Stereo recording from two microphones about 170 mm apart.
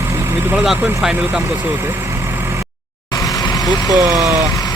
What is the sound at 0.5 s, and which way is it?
Speech, centre (ahead or behind).